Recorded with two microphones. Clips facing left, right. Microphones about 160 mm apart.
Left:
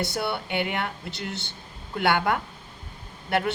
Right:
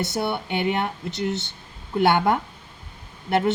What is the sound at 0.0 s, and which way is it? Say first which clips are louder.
A woman's voice: right 3 dB; 20° right (ahead or behind).